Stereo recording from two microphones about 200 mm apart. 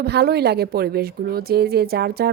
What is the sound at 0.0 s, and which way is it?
A woman's voice, 55° right (ahead or behind).